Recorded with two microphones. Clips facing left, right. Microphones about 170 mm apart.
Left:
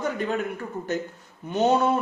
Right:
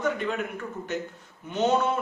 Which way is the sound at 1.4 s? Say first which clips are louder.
Left 3 dB; 40° left (ahead or behind).